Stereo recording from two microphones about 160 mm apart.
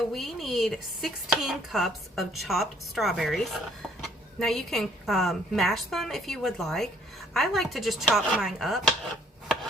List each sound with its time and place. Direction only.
0.1 s speech: centre (ahead or behind)